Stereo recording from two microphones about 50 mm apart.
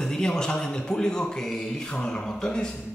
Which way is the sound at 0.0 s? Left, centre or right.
Centre.